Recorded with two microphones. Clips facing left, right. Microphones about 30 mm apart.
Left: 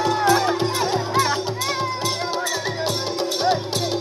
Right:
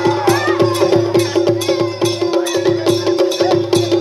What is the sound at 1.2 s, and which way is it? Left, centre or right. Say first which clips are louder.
Music: right 7 dB; right.